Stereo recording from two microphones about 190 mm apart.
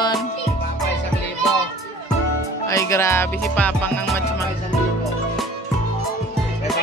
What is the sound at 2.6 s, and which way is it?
Music, 15° left (ahead or behind).